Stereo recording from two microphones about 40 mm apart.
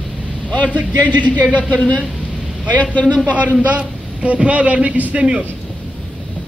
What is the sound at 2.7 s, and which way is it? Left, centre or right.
Speech, left.